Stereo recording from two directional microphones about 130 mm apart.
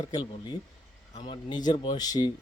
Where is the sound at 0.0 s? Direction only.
30° left (ahead or behind).